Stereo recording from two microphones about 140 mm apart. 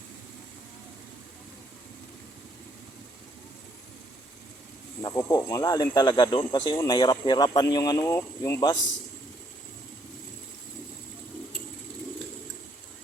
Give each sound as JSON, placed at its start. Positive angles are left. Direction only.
{"t": 5.0, "sound": "speech", "side_deg": 25}